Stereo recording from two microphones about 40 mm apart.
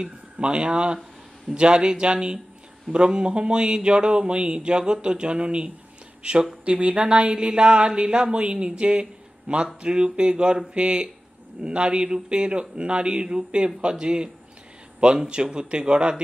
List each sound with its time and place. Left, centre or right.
0.0 s speech: right